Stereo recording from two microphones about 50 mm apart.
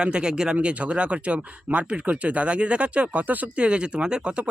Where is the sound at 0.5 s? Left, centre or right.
Right.